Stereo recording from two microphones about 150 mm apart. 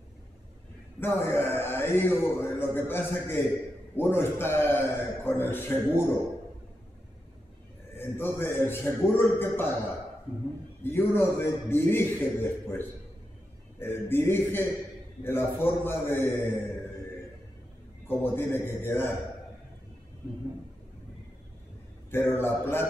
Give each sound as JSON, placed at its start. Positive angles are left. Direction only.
{"t": 0.9, "sound": "a man's voice", "side_deg": 15}
{"t": 8.2, "sound": "a man's voice", "side_deg": 15}
{"t": 10.8, "sound": "a man's voice", "side_deg": 15}
{"t": 18.0, "sound": "a man's voice", "side_deg": 15}
{"t": 22.1, "sound": "a man's voice", "side_deg": 15}